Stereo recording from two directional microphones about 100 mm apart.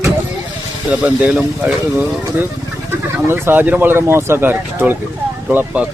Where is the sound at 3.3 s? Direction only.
25° right (ahead or behind).